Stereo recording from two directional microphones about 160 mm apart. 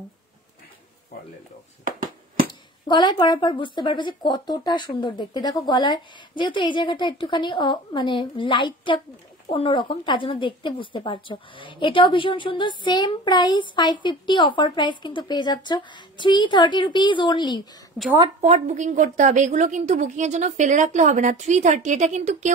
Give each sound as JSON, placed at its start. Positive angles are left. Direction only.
{"t": 1.9, "sound": "a sound", "side_deg": -60}
{"t": 2.9, "sound": "a woman's voice", "side_deg": 25}
{"t": 18.4, "sound": "a woman's voice", "side_deg": -45}